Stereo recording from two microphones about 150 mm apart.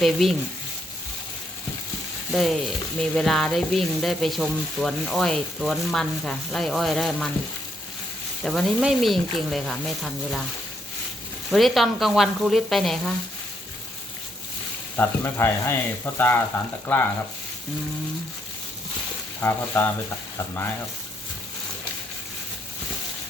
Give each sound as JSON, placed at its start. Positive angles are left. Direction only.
{"t": 0.0, "sound": "frying", "side_deg": 0}
{"t": 2.3, "sound": "frying", "side_deg": 0}
{"t": 8.4, "sound": "frying", "side_deg": 0}
{"t": 11.5, "sound": "frying", "side_deg": 0}
{"t": 14.9, "sound": "speech", "side_deg": 15}
{"t": 19.4, "sound": "speech", "side_deg": 15}